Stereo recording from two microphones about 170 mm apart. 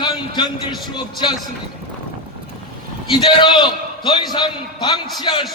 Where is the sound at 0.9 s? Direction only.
25° left (ahead or behind).